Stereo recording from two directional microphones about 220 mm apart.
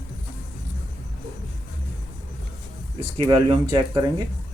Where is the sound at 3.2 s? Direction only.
20° right (ahead or behind).